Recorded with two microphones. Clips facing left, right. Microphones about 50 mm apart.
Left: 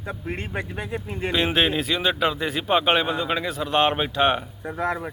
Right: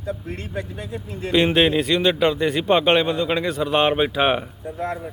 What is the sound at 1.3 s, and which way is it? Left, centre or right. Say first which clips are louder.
Speech: right 5 dB; centre.